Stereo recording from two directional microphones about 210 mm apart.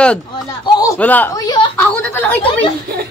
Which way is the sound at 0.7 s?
15° left (ahead or behind).